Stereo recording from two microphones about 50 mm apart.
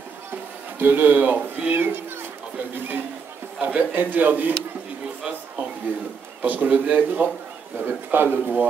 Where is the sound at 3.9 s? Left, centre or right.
Right.